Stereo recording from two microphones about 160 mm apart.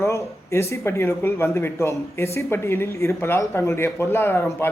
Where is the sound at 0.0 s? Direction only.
15° left (ahead or behind).